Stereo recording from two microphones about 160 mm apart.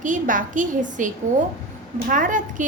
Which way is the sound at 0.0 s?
55° right (ahead or behind).